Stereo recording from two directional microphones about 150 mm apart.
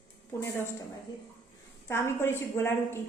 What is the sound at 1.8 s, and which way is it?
A woman's voice, 15° left (ahead or behind).